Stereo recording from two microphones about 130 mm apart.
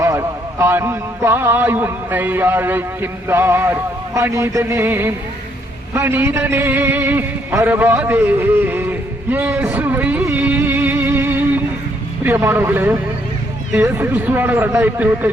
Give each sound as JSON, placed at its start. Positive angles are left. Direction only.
{"t": 0.0, "sound": "a man's voice", "side_deg": -20}
{"t": 10.3, "sound": "music", "side_deg": -15}
{"t": 12.2, "sound": "a man's voice", "side_deg": -15}